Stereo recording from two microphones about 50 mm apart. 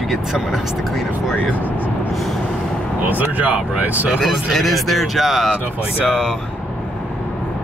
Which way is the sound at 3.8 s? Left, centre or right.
Right.